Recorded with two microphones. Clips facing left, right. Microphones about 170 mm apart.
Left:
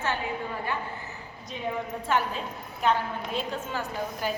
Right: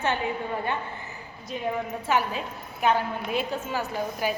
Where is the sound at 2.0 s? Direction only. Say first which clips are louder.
Right 1 dB; 5° right (ahead or behind).